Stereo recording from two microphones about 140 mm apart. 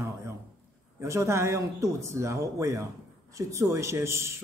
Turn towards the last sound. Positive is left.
turn(degrees=-20)  # may be behind; listen again after turning